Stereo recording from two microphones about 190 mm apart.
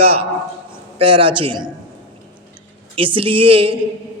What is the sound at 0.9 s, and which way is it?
Speech, 30° right (ahead or behind).